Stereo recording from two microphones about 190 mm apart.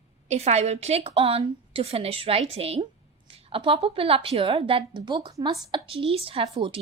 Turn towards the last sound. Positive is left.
turn(degrees=-30)  # may be behind; listen again after turning